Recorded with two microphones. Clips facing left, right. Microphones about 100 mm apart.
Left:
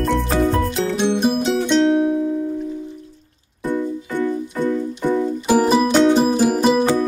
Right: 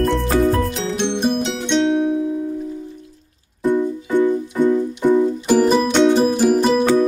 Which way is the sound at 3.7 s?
20° right (ahead or behind).